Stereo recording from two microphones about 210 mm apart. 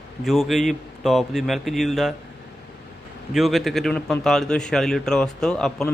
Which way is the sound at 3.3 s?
Centre (ahead or behind).